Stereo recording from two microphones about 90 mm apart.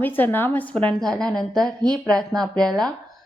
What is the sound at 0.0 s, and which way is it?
A woman's voice, 20° left (ahead or behind).